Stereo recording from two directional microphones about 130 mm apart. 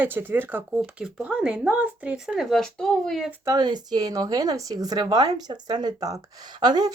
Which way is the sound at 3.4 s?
30° right (ahead or behind).